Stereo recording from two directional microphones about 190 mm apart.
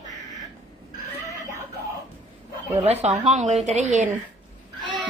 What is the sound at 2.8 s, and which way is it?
A woman's voice, 35° right (ahead or behind).